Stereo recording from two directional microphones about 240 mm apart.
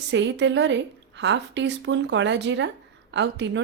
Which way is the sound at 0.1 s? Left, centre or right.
Right.